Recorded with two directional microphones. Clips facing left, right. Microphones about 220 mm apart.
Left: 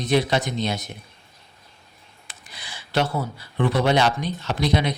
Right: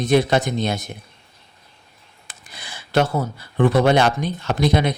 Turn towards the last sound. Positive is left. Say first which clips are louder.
# right 4 dB
turn(degrees=-50)  # may be behind; listen again after turning